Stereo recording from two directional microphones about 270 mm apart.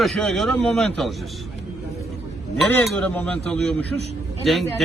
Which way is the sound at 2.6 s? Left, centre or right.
Centre.